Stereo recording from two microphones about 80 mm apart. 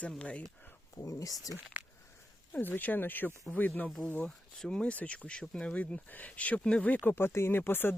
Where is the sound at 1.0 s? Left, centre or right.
Left.